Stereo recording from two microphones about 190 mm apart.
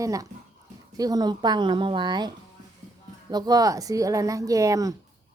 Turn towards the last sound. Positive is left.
turn(degrees=-15)  # may be behind; listen again after turning